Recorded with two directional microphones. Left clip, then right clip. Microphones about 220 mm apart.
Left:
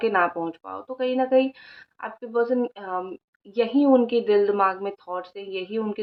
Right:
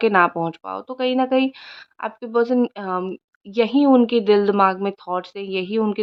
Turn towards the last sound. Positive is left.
turn(degrees=-50)  # may be behind; listen again after turning